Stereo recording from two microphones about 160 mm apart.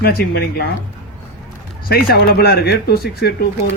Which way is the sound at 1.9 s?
70° left (ahead or behind).